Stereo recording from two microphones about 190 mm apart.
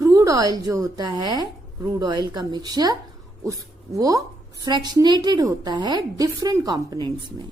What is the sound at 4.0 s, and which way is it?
Speech, 20° right (ahead or behind).